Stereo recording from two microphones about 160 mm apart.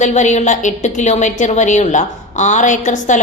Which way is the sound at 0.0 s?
50° left (ahead or behind).